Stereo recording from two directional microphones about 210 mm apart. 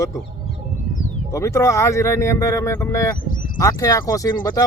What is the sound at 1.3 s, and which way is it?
Speech, 15° left (ahead or behind).